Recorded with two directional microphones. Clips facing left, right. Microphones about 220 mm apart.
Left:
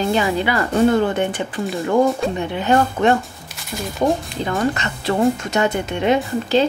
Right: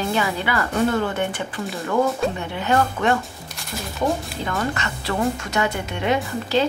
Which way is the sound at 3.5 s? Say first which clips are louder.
Left 5 dB; centre (ahead or behind).